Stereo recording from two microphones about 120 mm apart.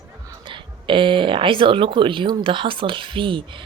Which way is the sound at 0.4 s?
45° right (ahead or behind).